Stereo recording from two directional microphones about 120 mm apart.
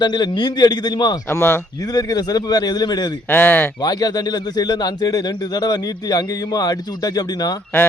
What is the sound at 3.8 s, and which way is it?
Speech, 35° left (ahead or behind).